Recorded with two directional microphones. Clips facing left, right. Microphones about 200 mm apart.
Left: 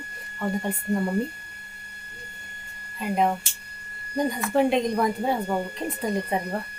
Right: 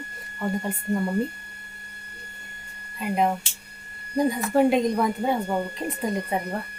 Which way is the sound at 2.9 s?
Centre (ahead or behind).